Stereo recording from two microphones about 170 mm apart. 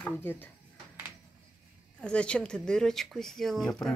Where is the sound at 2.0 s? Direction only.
5° left (ahead or behind).